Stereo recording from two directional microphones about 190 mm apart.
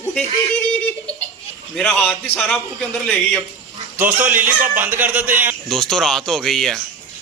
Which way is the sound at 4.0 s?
10° right (ahead or behind).